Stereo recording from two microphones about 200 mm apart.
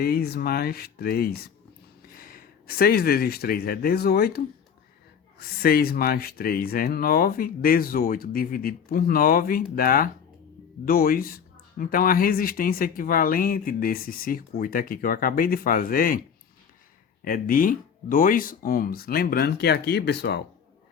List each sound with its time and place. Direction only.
0.0 s speech: 50° left (ahead or behind)
17.2 s speech: 45° left (ahead or behind)